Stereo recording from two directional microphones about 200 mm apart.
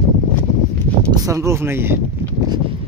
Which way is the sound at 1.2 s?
15° right (ahead or behind).